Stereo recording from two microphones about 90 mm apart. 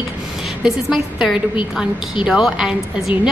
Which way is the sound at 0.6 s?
5° right (ahead or behind).